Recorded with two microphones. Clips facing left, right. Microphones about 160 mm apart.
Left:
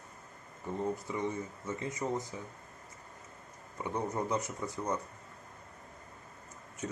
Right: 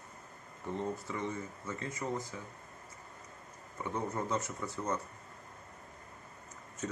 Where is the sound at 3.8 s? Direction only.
15° left (ahead or behind).